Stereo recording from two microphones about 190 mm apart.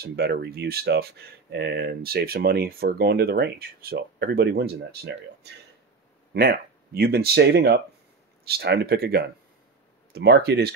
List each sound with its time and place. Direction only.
0.0 s speech: 60° right (ahead or behind)